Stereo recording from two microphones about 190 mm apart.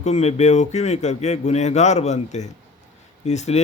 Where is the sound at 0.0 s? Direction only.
35° left (ahead or behind).